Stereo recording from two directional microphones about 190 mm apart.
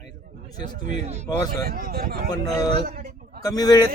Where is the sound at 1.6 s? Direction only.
50° right (ahead or behind).